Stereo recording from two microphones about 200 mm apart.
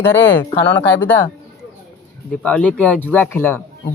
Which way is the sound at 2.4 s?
5° left (ahead or behind).